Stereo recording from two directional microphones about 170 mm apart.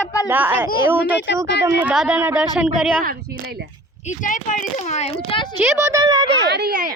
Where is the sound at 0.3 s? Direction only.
10° right (ahead or behind).